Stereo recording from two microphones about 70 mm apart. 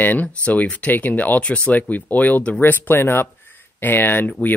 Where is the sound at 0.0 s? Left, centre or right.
Left.